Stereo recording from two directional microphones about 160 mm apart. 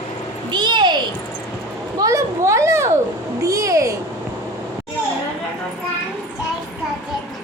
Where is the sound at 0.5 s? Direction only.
25° right (ahead or behind).